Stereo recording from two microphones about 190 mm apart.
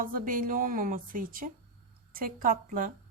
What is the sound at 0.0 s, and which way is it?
A woman's voice, 45° right (ahead or behind).